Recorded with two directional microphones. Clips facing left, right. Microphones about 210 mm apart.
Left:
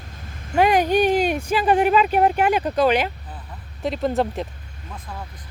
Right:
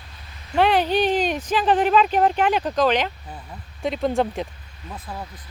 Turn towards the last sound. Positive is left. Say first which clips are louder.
# right 2 dB
turn(degrees=-5)  # may be behind; listen again after turning